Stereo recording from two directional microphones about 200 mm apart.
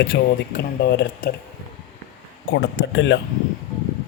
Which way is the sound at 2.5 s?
65° left (ahead or behind).